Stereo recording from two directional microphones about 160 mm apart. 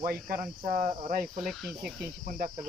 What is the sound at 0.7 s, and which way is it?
Cricket, 50° right (ahead or behind).